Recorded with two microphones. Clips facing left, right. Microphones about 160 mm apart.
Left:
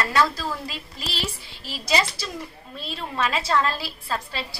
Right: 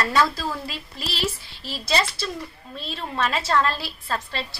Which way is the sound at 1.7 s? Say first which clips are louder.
Even; 15° left (ahead or behind).